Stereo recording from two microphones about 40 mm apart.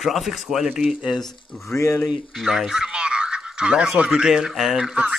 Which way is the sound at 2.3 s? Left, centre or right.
Centre.